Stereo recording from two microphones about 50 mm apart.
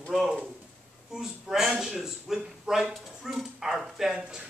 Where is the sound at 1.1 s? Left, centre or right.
Centre.